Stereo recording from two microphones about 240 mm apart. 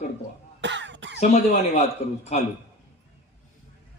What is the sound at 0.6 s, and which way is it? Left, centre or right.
Cough, right.